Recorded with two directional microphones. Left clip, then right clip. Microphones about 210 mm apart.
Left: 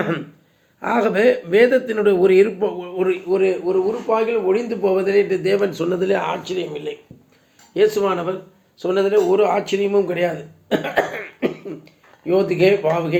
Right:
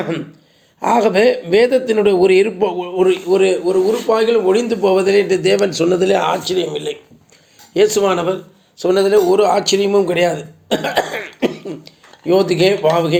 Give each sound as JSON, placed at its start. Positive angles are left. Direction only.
{"t": 0.8, "sound": "speech", "side_deg": -20}
{"t": 7.9, "sound": "a man's voice", "side_deg": -30}